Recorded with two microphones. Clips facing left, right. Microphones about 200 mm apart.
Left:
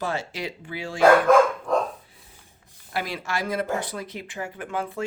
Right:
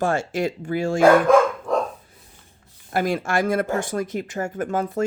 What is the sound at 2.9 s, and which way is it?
Speech, 50° right (ahead or behind).